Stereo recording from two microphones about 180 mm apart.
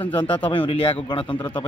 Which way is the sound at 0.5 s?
25° left (ahead or behind).